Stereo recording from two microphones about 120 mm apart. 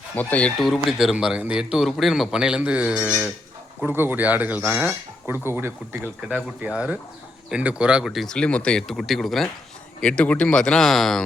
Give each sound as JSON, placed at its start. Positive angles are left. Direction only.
{"t": 0.2, "sound": "speech", "side_deg": 10}
{"t": 0.6, "sound": "speech", "side_deg": 0}